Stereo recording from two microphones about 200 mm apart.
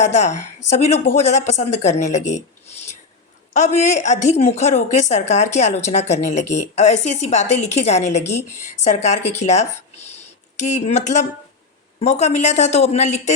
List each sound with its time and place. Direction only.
0.0 s a woman's voice: 35° left (ahead or behind)
3.5 s a woman's voice: 35° left (ahead or behind)